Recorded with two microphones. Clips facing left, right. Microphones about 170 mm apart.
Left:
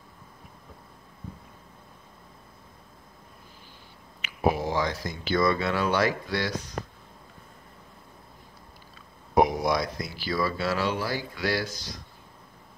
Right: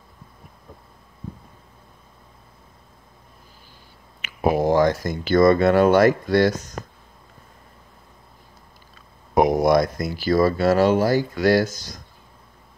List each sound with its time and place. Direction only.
4.2 s speech: 50° right (ahead or behind)
9.3 s speech: 50° right (ahead or behind)